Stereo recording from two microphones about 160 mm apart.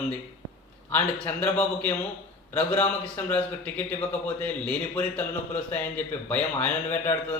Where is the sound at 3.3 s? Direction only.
10° left (ahead or behind).